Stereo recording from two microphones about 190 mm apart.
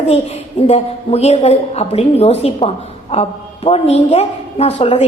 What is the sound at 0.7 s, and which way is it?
A woman's voice, 35° left (ahead or behind).